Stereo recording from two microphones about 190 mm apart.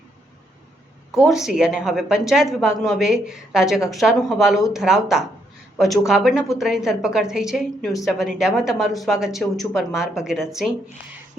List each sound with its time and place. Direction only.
1.2 s a woman's voice: centre (ahead or behind)